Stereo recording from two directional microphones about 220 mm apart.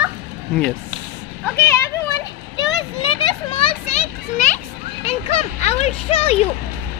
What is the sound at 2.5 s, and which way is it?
Children playing, 20° left (ahead or behind).